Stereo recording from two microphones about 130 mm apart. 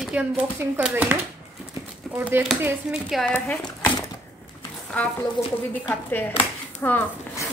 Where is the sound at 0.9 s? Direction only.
15° right (ahead or behind).